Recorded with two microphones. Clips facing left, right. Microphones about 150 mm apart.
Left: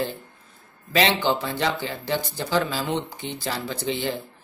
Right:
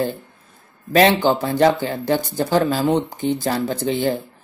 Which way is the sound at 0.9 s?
45° right (ahead or behind).